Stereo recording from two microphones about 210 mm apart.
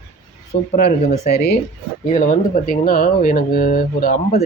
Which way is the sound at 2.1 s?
35° left (ahead or behind).